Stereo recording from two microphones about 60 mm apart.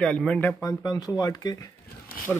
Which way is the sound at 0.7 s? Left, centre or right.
Left.